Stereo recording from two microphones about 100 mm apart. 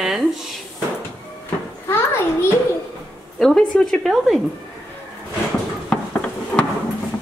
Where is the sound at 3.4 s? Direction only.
5° left (ahead or behind).